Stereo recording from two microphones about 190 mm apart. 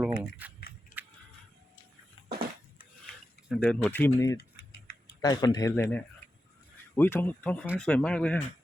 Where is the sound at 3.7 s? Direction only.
10° left (ahead or behind).